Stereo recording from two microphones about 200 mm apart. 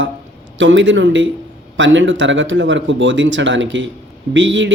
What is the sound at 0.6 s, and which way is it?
Speech, 70° right (ahead or behind).